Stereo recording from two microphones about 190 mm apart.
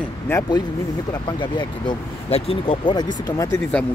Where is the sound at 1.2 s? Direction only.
25° left (ahead or behind).